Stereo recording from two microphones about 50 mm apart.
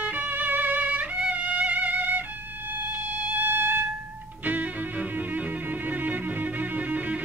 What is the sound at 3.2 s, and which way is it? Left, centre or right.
Music, right.